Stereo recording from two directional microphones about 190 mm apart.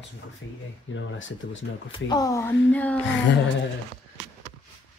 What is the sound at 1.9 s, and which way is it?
Speech, 20° left (ahead or behind).